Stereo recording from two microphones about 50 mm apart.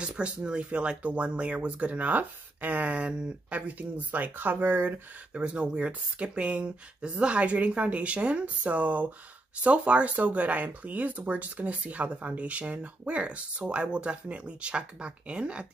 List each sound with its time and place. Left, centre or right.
0.0 s speech: right
5.3 s speech: right